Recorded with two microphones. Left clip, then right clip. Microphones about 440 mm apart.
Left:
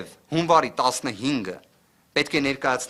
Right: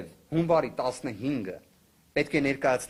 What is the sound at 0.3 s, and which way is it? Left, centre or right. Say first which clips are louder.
Speech: left 6 dB; left.